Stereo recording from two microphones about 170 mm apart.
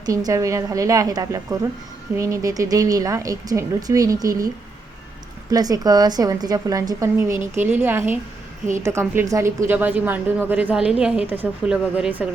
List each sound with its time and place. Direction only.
0.0 s a woman's voice: 20° right (ahead or behind)
5.5 s a woman's voice: 20° right (ahead or behind)